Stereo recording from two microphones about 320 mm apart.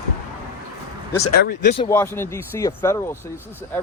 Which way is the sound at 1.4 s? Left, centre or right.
Left.